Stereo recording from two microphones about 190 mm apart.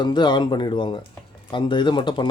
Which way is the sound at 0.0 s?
25° left (ahead or behind).